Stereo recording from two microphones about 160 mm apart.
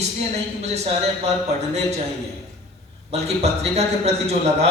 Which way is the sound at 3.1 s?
40° right (ahead or behind).